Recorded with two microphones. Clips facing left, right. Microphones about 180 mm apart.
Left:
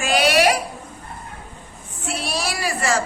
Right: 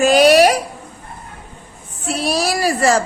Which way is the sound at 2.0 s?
40° right (ahead or behind).